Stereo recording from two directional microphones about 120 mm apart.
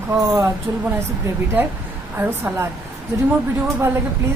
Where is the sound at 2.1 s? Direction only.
15° right (ahead or behind).